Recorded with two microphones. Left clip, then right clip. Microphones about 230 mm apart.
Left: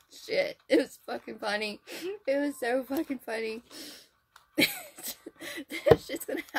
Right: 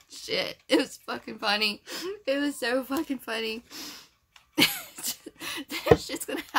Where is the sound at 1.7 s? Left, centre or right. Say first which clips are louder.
Right 3 dB; centre.